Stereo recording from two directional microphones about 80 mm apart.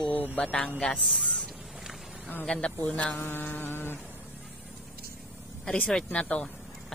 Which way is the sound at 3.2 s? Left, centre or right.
Left.